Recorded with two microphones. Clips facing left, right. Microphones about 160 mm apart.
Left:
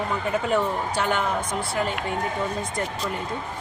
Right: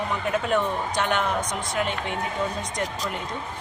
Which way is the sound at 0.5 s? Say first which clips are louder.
Left 1 dB; 5° left (ahead or behind).